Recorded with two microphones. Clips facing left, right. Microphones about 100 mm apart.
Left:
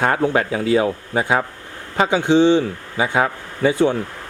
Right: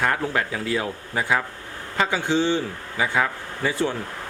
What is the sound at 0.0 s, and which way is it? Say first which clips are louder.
A man's voice: left 6 dB; 30° left (ahead or behind).